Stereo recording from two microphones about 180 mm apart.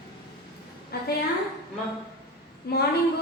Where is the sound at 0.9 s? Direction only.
60° left (ahead or behind).